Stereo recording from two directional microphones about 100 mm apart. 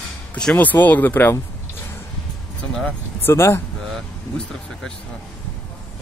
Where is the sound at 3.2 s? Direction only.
25° left (ahead or behind).